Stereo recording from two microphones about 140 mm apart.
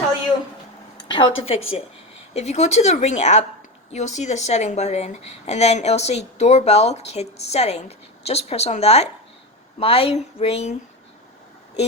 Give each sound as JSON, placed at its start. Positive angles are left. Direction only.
{"t": 1.0, "sound": "a woman's voice", "side_deg": 35}